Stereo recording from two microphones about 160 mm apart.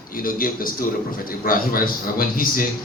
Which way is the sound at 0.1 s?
60° left (ahead or behind).